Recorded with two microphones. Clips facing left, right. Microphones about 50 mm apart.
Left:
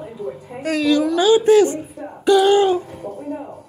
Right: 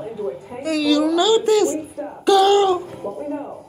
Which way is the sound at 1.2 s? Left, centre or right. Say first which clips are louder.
Left 7 dB; left.